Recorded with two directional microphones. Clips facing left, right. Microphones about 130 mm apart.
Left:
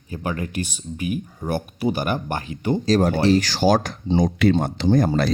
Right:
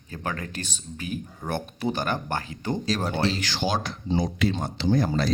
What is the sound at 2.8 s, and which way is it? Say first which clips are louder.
Speech: left 9 dB; 45° left (ahead or behind).